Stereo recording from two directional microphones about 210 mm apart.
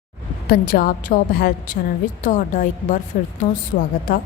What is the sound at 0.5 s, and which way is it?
A woman's voice, 45° left (ahead or behind).